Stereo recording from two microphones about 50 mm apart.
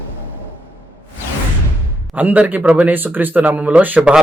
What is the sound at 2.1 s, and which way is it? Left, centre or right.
Speech, right.